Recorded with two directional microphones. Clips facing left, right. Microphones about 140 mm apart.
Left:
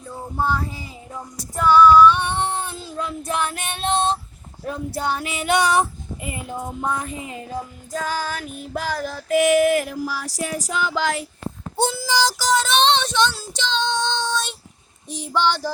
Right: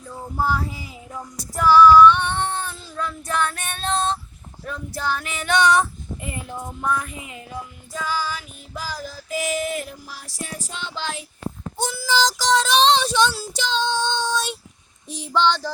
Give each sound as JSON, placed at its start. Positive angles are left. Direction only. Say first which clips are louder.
{"t": 0.3, "sound": "female singing", "louder": "even", "side_deg": -5}
{"t": 3.0, "sound": "child singing", "louder": "even", "side_deg": 20}
{"t": 6.2, "sound": "child singing", "louder": "left 3 dB", "side_deg": 15}
{"t": 7.9, "sound": "music", "louder": "left 1 dB", "side_deg": 50}
{"t": 11.8, "sound": "a sound", "louder": "left 1 dB", "side_deg": 20}
{"t": 12.4, "sound": "child singing", "louder": "right 1 dB", "side_deg": 5}
{"t": 15.1, "sound": "a sound", "louder": "right 1 dB", "side_deg": 0}